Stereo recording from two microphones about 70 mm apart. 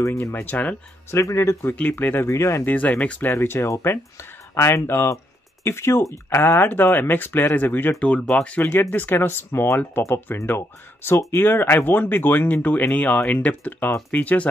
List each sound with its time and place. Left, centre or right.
0.0 s speech: left
0.3 s speech: left
1.1 s speech: left
1.8 s speech: left
2.6 s speech: left
3.3 s speech: left
8.3 s speech: centre
8.5 s speech: left